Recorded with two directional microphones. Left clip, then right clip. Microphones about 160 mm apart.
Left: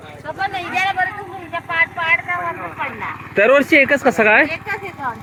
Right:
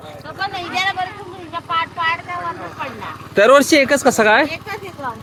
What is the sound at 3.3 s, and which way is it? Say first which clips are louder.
Speech: right 2 dB; 25° right (ahead or behind).